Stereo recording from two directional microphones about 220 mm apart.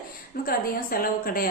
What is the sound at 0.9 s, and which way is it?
Speech, 40° left (ahead or behind).